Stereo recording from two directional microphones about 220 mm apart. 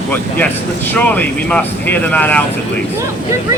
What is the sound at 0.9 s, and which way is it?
Speech, 10° left (ahead or behind).